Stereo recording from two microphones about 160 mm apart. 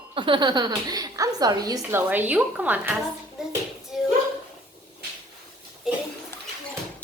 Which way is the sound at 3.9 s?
Centre (ahead or behind).